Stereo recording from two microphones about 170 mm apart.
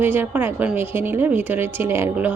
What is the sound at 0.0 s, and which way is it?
Speech, 10° right (ahead or behind).